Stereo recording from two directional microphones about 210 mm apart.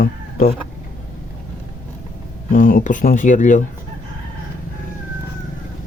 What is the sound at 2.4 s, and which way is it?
A man's voice, 40° left (ahead or behind).